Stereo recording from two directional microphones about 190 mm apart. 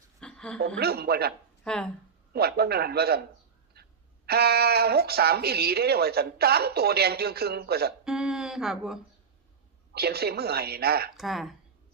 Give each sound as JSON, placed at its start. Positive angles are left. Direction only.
{"t": 0.2, "sound": "a sound", "side_deg": 5}
{"t": 0.8, "sound": "speech", "side_deg": -55}
{"t": 1.6, "sound": "speech", "side_deg": 5}
{"t": 2.3, "sound": "speech", "side_deg": -55}
{"t": 3.8, "sound": "quack", "side_deg": -55}
{"t": 4.3, "sound": "speech", "side_deg": -55}
{"t": 8.0, "sound": "speech", "side_deg": -5}
{"t": 9.9, "sound": "speech", "side_deg": -55}
{"t": 11.2, "sound": "speech", "side_deg": 0}